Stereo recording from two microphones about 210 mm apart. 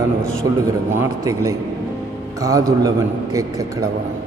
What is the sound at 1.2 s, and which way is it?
A man's voice, 15° right (ahead or behind).